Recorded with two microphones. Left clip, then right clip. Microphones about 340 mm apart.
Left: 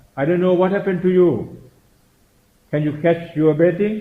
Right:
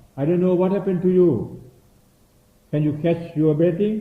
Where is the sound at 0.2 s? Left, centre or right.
Left.